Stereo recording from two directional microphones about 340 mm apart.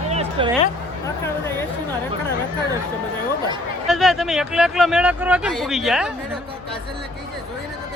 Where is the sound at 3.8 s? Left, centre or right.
Centre.